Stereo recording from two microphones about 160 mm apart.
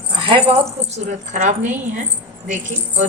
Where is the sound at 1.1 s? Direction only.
50° right (ahead or behind).